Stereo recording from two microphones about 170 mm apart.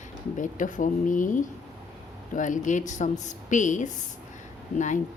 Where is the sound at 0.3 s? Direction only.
50° left (ahead or behind).